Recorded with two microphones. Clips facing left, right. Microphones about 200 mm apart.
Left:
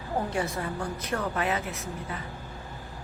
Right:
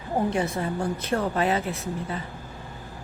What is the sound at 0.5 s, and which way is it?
Speech, 25° right (ahead or behind).